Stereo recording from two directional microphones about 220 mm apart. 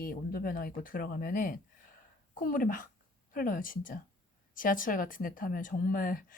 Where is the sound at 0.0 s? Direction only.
40° left (ahead or behind).